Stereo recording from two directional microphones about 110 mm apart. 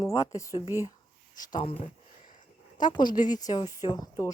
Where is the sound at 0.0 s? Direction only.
30° left (ahead or behind).